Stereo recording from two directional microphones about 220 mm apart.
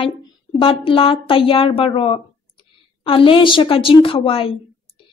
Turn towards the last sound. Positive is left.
turn(degrees=25)  # may be behind; listen again after turning